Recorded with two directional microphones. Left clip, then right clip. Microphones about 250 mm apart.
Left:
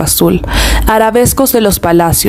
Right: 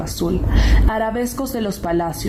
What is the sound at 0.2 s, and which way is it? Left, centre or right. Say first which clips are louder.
Speech: left 10 dB; left.